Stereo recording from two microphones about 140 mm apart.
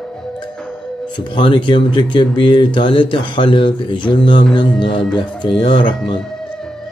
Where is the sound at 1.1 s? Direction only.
35° left (ahead or behind).